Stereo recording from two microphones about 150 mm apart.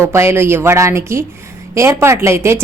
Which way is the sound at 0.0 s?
15° right (ahead or behind).